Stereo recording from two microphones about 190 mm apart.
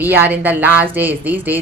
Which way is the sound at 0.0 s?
10° right (ahead or behind).